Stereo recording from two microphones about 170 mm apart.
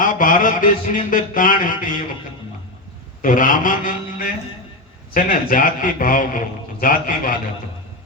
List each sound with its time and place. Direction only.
0.0 s a man's voice: 50° left (ahead or behind)
3.2 s a man's voice: 50° left (ahead or behind)